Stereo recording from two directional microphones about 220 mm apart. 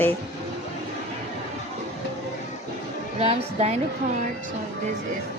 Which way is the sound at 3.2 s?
30° right (ahead or behind).